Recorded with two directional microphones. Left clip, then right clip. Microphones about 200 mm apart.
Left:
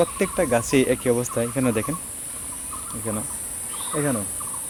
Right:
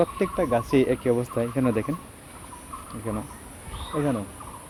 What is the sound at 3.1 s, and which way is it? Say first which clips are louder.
Speech: left 2 dB; 10° left (ahead or behind).